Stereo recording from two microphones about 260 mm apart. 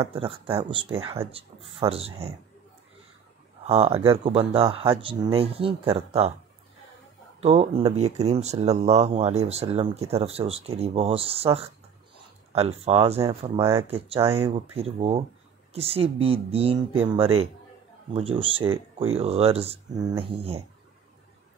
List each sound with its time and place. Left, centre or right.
0.0 s speech: right
3.6 s speech: right
7.3 s speech: right